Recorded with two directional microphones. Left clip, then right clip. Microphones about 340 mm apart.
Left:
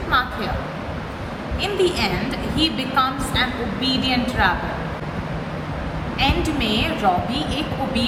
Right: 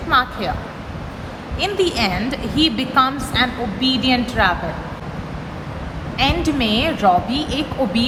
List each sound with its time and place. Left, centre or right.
0.1 s a sound: centre
1.6 s a woman's voice: centre
6.1 s a woman's voice: right